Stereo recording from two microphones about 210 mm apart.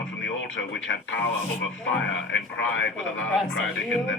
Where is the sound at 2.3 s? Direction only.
60° left (ahead or behind).